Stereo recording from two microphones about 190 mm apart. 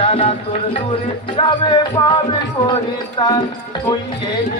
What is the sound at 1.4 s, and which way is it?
Speech, 25° left (ahead or behind).